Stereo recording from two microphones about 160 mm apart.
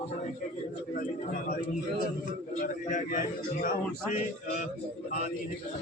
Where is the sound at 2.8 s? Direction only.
50° left (ahead or behind).